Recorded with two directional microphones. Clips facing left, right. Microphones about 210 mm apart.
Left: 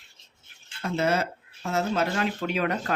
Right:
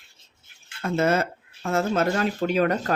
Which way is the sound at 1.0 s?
50° right (ahead or behind).